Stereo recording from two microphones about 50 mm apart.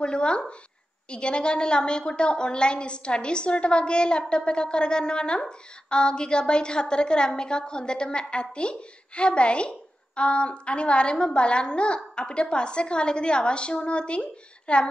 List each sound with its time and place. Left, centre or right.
0.0 s a woman's voice: centre